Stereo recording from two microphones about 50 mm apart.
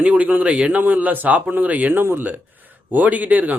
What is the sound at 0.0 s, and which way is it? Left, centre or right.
A man's voice, right.